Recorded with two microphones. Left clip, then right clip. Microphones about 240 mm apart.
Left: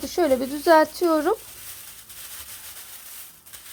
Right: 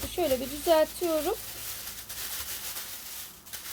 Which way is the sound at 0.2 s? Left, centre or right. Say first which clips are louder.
Left 7 dB; left.